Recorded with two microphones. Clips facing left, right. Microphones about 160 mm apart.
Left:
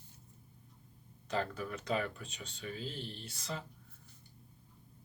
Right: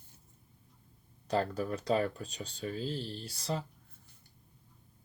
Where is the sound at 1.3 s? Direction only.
35° right (ahead or behind).